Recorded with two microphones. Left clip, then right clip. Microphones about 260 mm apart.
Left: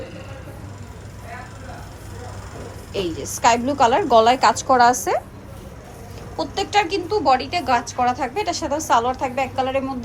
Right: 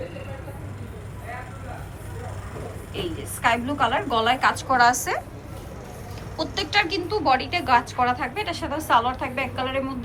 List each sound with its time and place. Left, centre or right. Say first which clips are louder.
2.9 s a woman's voice: left 7 dB; centre
6.3 s a woman's voice: left 3 dB; centre